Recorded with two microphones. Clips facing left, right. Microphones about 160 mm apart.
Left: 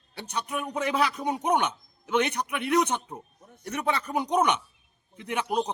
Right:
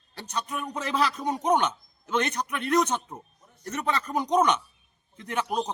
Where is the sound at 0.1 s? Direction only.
10° left (ahead or behind).